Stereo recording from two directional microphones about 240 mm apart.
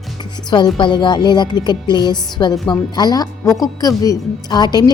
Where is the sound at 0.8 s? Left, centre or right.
Centre.